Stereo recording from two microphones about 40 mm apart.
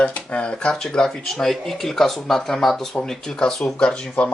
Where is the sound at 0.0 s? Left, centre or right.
Left.